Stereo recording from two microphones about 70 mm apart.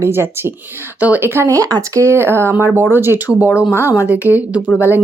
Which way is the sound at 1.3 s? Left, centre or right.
Right.